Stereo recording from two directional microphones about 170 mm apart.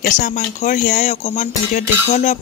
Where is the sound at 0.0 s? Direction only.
55° left (ahead or behind).